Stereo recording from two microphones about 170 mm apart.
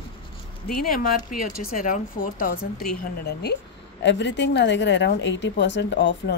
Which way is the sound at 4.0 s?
90° left.